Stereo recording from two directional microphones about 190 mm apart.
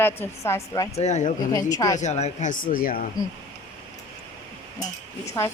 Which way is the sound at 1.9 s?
35° left (ahead or behind).